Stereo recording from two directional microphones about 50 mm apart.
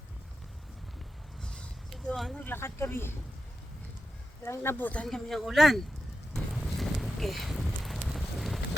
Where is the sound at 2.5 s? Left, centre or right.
Left.